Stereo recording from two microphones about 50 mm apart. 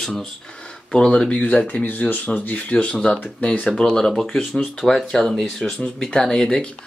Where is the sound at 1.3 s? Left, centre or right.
Left.